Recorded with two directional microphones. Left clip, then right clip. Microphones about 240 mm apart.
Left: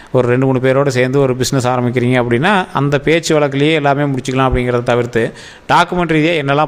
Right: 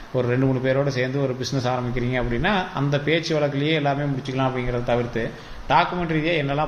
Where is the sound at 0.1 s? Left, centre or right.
Left.